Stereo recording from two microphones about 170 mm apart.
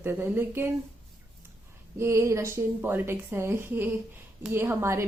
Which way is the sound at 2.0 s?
15° right (ahead or behind).